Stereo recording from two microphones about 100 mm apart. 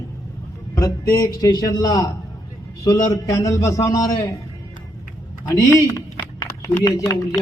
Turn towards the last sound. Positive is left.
turn(degrees=30)  # may be behind; listen again after turning